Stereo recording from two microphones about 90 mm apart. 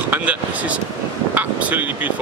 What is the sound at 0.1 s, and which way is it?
Speech, 15° right (ahead or behind).